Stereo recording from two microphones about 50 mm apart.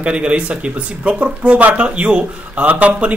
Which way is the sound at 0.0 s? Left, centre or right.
Right.